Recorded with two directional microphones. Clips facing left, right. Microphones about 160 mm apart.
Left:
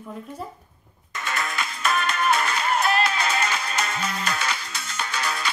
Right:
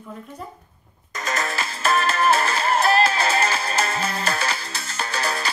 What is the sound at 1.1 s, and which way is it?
Music, 40° right (ahead or behind).